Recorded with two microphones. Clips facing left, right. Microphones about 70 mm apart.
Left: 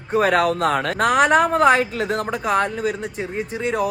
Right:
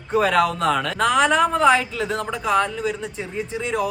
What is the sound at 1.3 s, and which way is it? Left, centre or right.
Speech, left.